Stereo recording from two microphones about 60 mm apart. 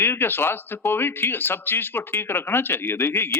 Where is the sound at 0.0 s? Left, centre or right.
Left.